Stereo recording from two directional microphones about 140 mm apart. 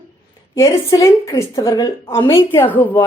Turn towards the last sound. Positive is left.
turn(degrees=15)  # may be behind; listen again after turning